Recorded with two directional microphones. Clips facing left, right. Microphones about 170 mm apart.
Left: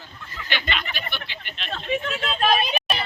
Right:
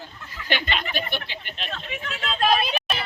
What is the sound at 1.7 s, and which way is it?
Speech, 30° left (ahead or behind).